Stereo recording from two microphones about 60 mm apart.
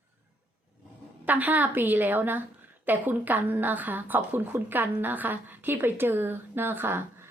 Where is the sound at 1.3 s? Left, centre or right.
Right.